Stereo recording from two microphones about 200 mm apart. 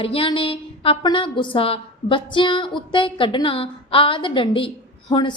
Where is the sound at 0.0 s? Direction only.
25° left (ahead or behind).